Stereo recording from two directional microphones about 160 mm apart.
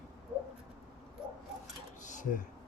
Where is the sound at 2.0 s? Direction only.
50° left (ahead or behind).